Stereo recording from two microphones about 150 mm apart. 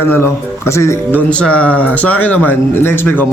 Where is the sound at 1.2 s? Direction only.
10° left (ahead or behind).